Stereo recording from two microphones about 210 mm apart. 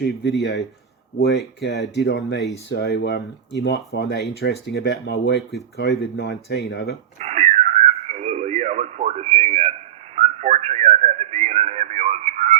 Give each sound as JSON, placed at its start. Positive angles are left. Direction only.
{"t": 0.0, "sound": "speech", "side_deg": 55}
{"t": 7.2, "sound": "radio", "side_deg": -30}
{"t": 10.2, "sound": "whistling", "side_deg": -30}